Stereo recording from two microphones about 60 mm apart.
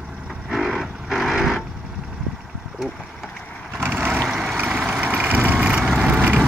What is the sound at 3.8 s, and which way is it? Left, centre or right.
Vehicle, right.